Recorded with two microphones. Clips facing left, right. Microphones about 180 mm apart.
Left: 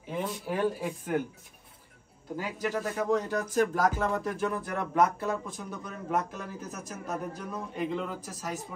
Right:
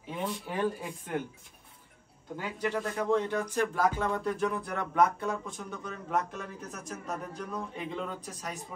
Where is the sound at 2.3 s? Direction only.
5° left (ahead or behind).